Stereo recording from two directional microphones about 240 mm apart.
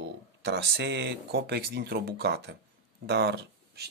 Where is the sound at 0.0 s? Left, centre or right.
Right.